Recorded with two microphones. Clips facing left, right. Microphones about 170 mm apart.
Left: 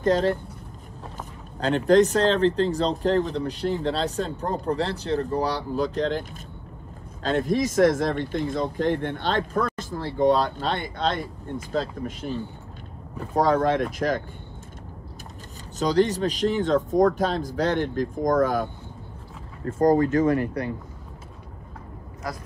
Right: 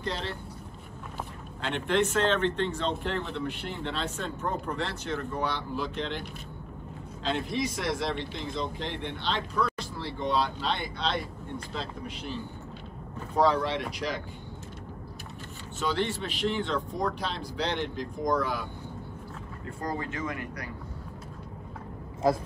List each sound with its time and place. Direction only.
0.0 s speech: 45° left (ahead or behind)
1.6 s speech: 40° left (ahead or behind)
7.2 s speech: 45° left (ahead or behind)
13.3 s speech: 45° left (ahead or behind)
15.8 s speech: 40° left (ahead or behind)